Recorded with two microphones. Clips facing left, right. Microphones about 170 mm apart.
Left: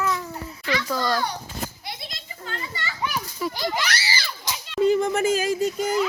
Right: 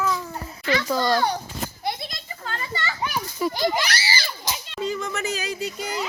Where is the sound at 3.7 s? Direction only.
35° right (ahead or behind).